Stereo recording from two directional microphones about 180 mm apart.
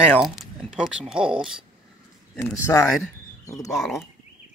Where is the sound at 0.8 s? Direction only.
5° right (ahead or behind).